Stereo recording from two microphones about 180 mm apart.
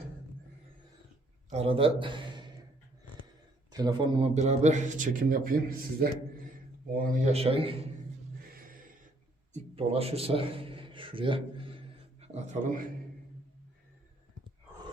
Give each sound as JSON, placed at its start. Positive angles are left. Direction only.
{"t": 1.5, "sound": "a man's voice", "side_deg": -35}
{"t": 3.7, "sound": "a man's voice", "side_deg": -20}
{"t": 7.3, "sound": "a man's voice", "side_deg": -35}
{"t": 8.5, "sound": "a sound", "side_deg": -50}
{"t": 9.5, "sound": "a sound", "side_deg": -35}
{"t": 12.2, "sound": "a man's voice", "side_deg": -40}